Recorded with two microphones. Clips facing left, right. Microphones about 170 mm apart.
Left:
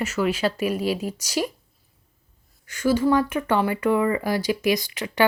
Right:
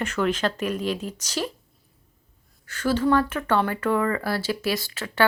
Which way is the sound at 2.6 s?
10° left (ahead or behind).